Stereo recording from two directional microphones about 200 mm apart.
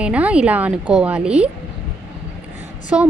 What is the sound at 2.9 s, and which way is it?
Speech, 5° right (ahead or behind).